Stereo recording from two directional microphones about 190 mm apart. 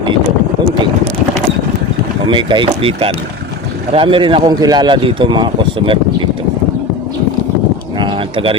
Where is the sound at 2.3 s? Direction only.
25° right (ahead or behind).